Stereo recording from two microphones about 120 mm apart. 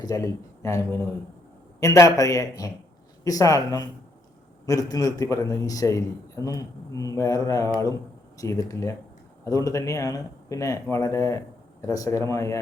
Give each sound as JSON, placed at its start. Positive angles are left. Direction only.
{"t": 0.0, "sound": "a man's voice", "side_deg": 30}